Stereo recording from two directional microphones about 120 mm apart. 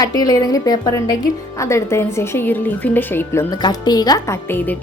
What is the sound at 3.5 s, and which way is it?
Speech, 35° left (ahead or behind).